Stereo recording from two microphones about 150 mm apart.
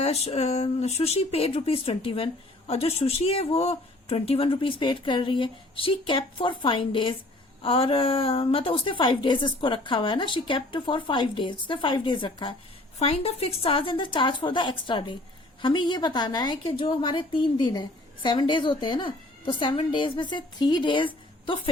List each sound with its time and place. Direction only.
0.0 s speech: 45° left (ahead or behind)